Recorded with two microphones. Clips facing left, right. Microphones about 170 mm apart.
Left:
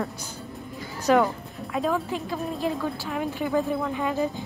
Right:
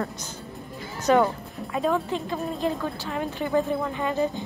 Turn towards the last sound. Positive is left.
turn(degrees=5)  # may be behind; listen again after turning